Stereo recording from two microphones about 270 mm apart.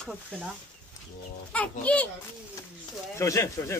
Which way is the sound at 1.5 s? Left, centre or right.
Centre.